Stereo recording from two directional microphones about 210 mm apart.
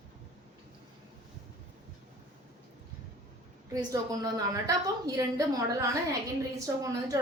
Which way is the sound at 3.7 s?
20° right (ahead or behind).